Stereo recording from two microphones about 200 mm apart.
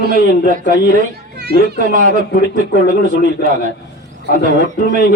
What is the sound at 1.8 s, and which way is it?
Speech, 40° right (ahead or behind).